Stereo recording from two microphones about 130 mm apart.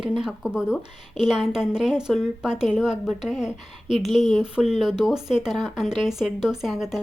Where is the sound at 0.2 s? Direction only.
5° right (ahead or behind).